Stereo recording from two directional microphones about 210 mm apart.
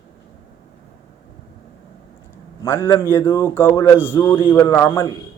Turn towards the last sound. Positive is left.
turn(degrees=15)  # may be behind; listen again after turning